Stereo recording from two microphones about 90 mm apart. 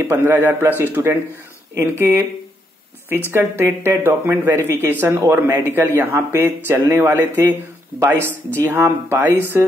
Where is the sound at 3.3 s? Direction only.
25° right (ahead or behind).